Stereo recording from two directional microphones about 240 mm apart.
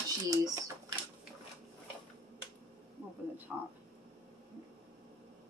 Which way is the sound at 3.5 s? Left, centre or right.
Centre.